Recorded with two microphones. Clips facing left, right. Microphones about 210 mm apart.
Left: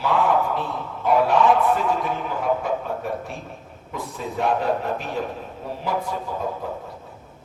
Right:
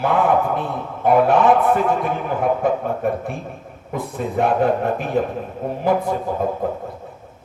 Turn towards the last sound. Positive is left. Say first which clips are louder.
# right 7 dB
turn(degrees=-55)  # may be behind; listen again after turning